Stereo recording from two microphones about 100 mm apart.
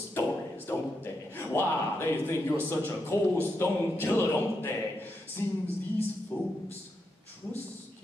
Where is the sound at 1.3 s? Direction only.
25° left (ahead or behind).